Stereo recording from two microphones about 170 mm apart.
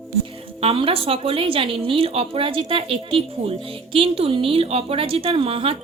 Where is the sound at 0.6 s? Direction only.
35° right (ahead or behind).